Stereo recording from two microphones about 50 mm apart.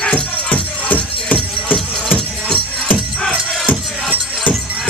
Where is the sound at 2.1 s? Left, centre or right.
Left.